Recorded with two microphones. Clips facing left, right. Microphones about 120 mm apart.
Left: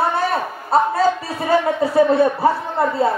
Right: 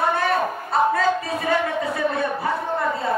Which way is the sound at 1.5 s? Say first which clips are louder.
Left 6 dB; 35° left (ahead or behind).